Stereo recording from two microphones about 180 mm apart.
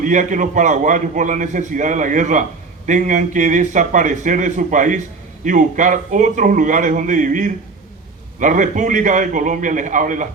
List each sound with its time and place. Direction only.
0.0 s a man's voice: 45° right (ahead or behind)